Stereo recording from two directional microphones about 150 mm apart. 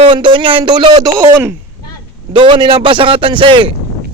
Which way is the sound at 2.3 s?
30° right (ahead or behind).